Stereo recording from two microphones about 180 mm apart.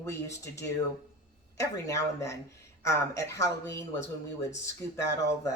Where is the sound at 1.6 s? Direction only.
15° left (ahead or behind).